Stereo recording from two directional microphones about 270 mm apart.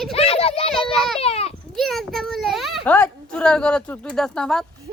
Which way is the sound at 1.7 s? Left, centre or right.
Centre.